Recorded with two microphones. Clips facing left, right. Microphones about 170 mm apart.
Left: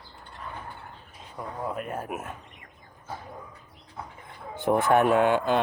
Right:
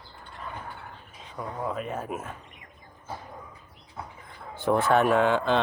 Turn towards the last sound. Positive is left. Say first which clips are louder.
# left 1 dB
turn(degrees=10)  # may be behind; listen again after turning